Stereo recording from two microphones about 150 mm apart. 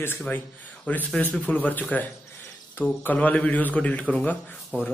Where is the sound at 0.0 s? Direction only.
15° left (ahead or behind).